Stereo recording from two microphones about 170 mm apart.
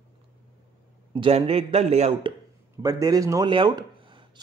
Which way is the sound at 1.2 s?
35° right (ahead or behind).